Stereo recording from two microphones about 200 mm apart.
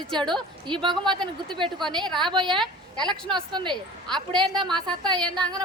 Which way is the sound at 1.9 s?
20° right (ahead or behind).